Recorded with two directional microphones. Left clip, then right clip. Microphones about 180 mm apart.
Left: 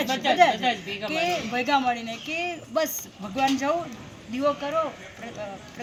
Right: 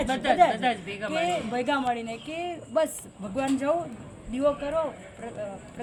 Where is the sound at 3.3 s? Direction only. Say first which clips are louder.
Left 2 dB; 20° right (ahead or behind).